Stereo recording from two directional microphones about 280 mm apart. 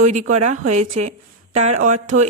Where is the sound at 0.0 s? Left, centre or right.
Right.